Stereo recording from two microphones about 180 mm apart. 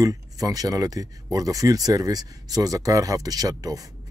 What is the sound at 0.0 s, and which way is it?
Speech, 20° right (ahead or behind).